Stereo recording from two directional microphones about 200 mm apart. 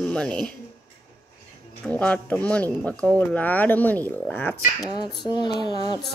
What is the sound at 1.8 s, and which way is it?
Speech, 5° left (ahead or behind).